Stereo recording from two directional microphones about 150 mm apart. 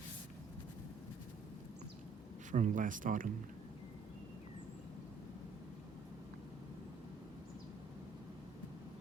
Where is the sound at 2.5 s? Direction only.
60° right (ahead or behind).